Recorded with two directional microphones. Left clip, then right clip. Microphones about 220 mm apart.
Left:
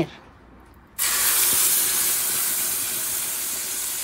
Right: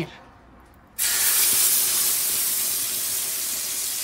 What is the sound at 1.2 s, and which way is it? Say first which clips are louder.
Spray: right 1 dB; 15° left (ahead or behind).